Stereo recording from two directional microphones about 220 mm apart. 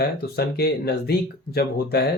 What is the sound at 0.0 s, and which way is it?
Speech, 45° left (ahead or behind).